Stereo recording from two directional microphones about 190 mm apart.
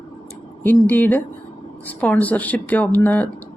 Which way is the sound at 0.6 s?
10° left (ahead or behind).